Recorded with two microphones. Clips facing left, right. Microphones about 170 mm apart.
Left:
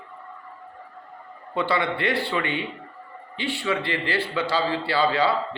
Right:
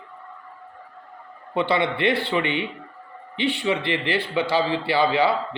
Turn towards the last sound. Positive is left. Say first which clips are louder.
# right 2 dB
turn(degrees=-15)  # may be behind; listen again after turning